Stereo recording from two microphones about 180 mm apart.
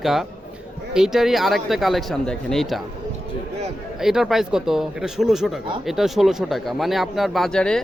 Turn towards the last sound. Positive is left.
turn(degrees=5)  # may be behind; listen again after turning